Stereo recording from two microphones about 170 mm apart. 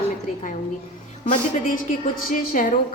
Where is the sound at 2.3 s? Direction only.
50° left (ahead or behind).